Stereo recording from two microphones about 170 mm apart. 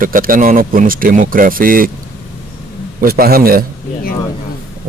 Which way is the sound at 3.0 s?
60° right (ahead or behind).